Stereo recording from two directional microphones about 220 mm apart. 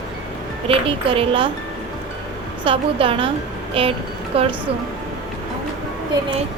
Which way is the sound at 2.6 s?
25° right (ahead or behind).